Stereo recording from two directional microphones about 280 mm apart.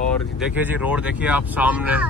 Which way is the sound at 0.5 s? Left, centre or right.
Centre.